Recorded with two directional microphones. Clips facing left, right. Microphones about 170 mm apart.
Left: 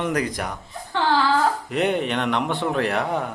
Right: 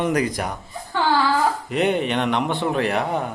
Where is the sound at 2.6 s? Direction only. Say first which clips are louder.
Right 1 dB; 10° right (ahead or behind).